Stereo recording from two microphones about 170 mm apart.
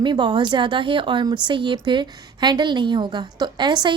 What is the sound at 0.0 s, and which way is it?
Speech, 25° right (ahead or behind).